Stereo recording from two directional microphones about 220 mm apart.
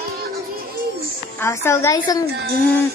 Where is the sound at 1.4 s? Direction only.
10° left (ahead or behind).